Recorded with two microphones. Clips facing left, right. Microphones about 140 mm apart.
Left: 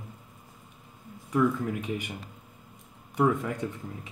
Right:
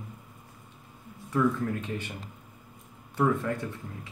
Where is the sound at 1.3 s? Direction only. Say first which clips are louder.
Left 1 dB; 15° left (ahead or behind).